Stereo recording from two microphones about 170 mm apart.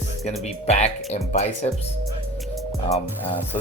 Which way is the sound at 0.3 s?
40° left (ahead or behind).